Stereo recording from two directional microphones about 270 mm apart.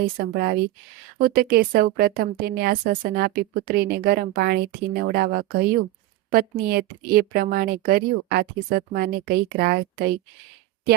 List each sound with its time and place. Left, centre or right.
0.0 s speech: right